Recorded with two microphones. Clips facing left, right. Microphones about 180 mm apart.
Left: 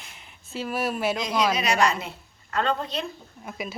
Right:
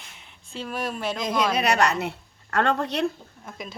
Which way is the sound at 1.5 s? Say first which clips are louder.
Right 1 dB; 65° right (ahead or behind).